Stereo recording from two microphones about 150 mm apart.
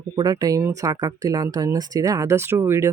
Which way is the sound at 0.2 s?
25° right (ahead or behind).